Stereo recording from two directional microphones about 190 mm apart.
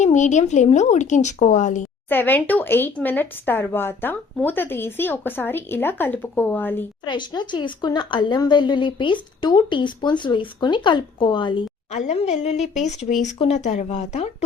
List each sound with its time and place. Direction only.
0.0 s speech: 40° left (ahead or behind)
2.0 s speech: 10° left (ahead or behind)
7.0 s speech: 25° left (ahead or behind)
11.9 s speech: 35° left (ahead or behind)